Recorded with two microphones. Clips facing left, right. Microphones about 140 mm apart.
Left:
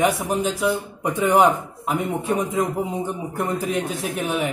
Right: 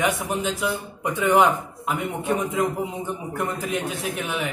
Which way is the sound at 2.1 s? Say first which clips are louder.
Left 2 dB; centre (ahead or behind).